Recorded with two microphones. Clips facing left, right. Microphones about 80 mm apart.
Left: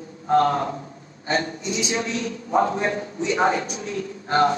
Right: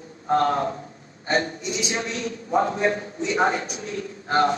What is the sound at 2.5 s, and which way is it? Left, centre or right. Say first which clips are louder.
Speech: left 2 dB; left.